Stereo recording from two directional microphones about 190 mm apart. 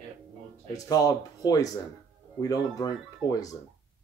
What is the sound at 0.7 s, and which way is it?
Speech, 20° left (ahead or behind).